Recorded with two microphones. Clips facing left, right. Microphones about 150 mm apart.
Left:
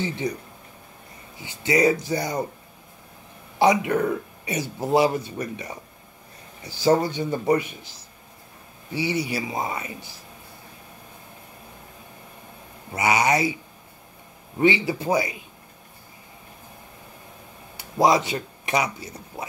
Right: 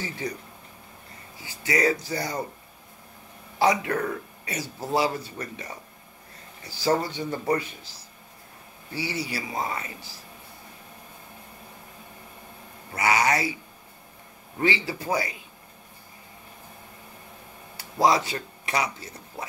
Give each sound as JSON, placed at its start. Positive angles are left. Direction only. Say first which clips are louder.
{"t": 0.0, "sound": "speech", "louder": "left 6 dB", "side_deg": 20}
{"t": 1.4, "sound": "speech", "louder": "left 4 dB", "side_deg": 25}
{"t": 3.5, "sound": "speech", "louder": "left 4 dB", "side_deg": 20}
{"t": 8.9, "sound": "speech", "louder": "left 5 dB", "side_deg": 20}
{"t": 12.9, "sound": "speech", "louder": "left 2 dB", "side_deg": 20}
{"t": 14.6, "sound": "speech", "louder": "left 6 dB", "side_deg": 20}
{"t": 17.7, "sound": "speech", "louder": "left 2 dB", "side_deg": 20}